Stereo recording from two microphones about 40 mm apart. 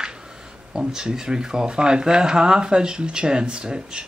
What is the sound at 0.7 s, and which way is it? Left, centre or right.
Speech, centre.